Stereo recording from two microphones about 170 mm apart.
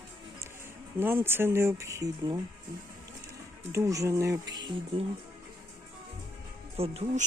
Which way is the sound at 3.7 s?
20° right (ahead or behind).